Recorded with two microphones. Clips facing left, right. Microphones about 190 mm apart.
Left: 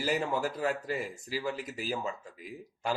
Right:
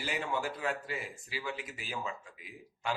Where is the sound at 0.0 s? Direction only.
40° left (ahead or behind).